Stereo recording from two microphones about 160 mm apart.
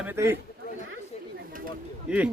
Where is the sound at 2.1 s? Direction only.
5° right (ahead or behind).